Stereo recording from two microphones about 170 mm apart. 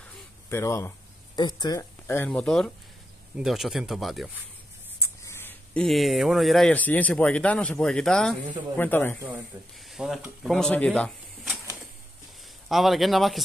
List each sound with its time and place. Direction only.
0.0 s a sound: 15° left (ahead or behind)
1.6 s speech: 20° left (ahead or behind); by 4.4 s centre (ahead or behind)
5.0 s a sound: 15° left (ahead or behind)
5.9 s speech: centre (ahead or behind)
9.8 s speech: centre (ahead or behind)
12.6 s speech: centre (ahead or behind)